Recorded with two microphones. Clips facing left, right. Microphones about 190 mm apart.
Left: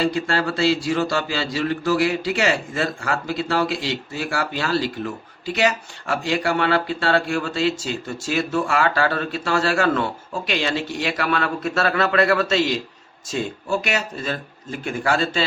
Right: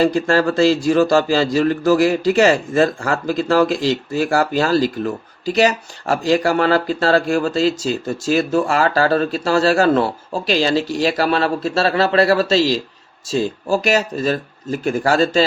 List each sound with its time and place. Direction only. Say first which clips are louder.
0.0 s a man's voice: right 6 dB; 45° right (ahead or behind)